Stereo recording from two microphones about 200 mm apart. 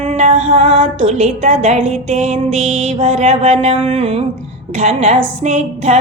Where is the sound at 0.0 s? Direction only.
35° right (ahead or behind).